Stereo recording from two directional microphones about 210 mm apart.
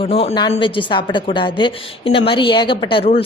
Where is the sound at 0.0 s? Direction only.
30° left (ahead or behind).